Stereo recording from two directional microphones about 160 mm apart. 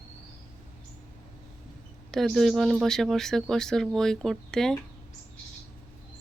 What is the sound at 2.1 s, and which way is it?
Speech, centre (ahead or behind).